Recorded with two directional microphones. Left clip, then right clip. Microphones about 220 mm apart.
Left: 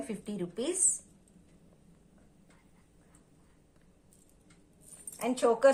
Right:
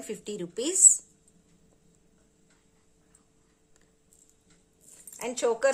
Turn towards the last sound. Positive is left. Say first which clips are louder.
# even
turn(degrees=-40)  # may be behind; listen again after turning